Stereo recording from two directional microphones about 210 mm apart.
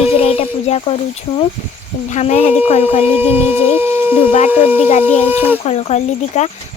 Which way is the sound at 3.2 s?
10° right (ahead or behind).